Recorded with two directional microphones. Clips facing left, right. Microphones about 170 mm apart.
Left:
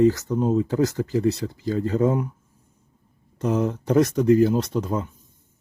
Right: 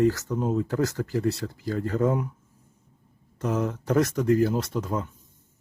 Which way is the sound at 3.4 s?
20° left (ahead or behind).